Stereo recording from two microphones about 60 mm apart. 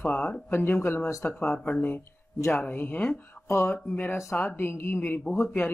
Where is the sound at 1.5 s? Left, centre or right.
Left.